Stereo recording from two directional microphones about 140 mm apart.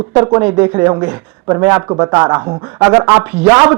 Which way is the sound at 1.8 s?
30° right (ahead or behind).